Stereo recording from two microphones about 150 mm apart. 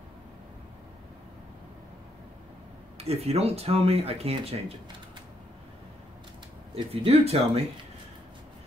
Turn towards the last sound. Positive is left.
turn(degrees=-40)  # may be behind; listen again after turning